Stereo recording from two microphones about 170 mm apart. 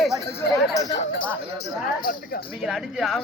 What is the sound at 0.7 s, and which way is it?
Speech, 20° left (ahead or behind).